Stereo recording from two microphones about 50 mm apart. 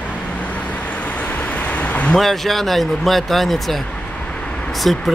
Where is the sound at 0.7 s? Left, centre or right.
Left.